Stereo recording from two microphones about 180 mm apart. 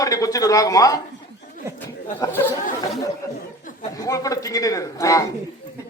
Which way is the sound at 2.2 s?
20° left (ahead or behind).